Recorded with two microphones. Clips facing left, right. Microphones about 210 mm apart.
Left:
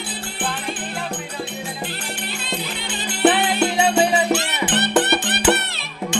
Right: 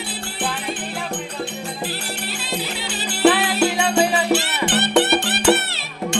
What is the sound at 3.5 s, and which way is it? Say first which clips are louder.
Music: right 1 dB; 5° right (ahead or behind).